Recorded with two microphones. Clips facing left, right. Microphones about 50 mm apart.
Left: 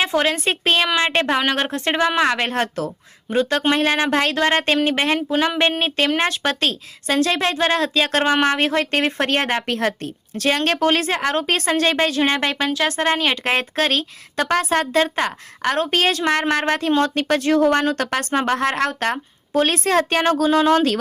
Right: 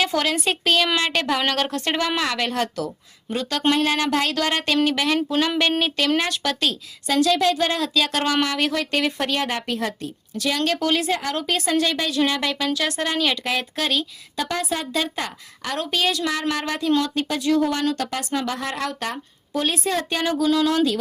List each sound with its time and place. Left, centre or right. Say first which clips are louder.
0.0 s speech: left 3 dB; left
8.2 s speech: left 4 dB; left